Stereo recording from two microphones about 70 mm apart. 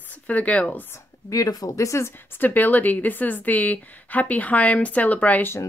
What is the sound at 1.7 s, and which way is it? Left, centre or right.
Speech, left.